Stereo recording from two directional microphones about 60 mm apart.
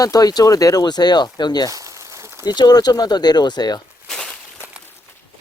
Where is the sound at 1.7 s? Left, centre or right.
Right.